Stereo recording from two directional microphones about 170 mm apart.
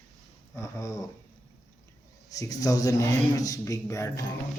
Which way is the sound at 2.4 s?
20° left (ahead or behind).